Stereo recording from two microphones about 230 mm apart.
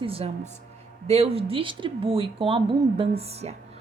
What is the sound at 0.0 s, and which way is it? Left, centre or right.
A woman's voice, right.